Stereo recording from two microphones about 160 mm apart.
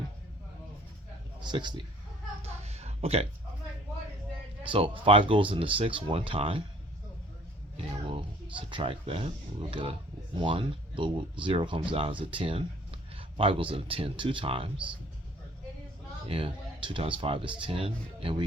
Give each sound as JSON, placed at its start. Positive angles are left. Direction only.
{"t": 1.4, "sound": "a man's voice", "side_deg": -30}
{"t": 2.4, "sound": "a sound", "side_deg": -40}
{"t": 4.6, "sound": "speech", "side_deg": -35}
{"t": 8.1, "sound": "speech", "side_deg": -30}
{"t": 16.2, "sound": "speech", "side_deg": -35}